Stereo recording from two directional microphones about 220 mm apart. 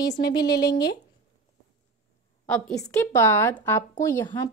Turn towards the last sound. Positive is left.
turn(degrees=15)  # may be behind; listen again after turning